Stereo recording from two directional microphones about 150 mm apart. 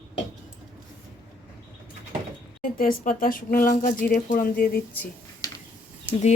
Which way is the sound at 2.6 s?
70° left (ahead or behind).